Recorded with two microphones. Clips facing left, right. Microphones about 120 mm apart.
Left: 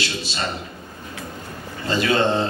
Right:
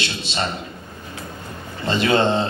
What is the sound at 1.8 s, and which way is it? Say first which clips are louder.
Speech: right 2 dB; 25° right (ahead or behind).